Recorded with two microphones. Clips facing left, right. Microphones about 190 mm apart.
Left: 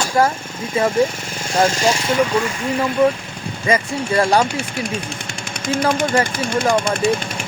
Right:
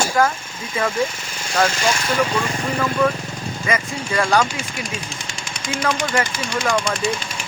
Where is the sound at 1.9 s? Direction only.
20° left (ahead or behind).